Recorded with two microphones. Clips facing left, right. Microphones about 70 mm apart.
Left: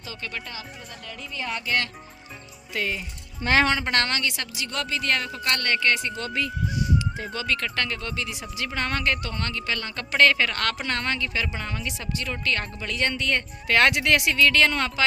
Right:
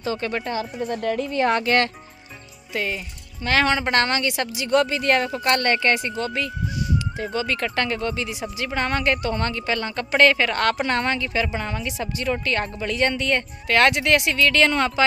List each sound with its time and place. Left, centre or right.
0.0 s speech: right
2.7 s speech: centre
3.4 s speech: left
3.8 s a woman's voice: centre
7.3 s speech: centre